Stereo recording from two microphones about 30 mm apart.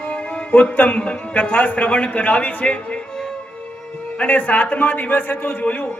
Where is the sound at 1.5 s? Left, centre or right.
Left.